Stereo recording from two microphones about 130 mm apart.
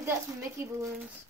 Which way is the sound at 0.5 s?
25° right (ahead or behind).